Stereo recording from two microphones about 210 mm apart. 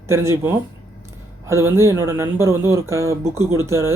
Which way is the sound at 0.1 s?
10° right (ahead or behind).